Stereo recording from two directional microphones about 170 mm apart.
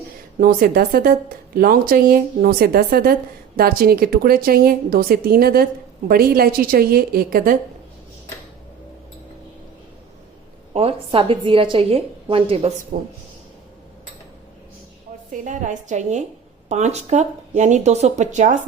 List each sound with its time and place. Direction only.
0.3 s speech: 55° right (ahead or behind)
10.8 s a woman's voice: 35° right (ahead or behind)
12.9 s speech: 55° right (ahead or behind)
15.3 s speech: 50° right (ahead or behind)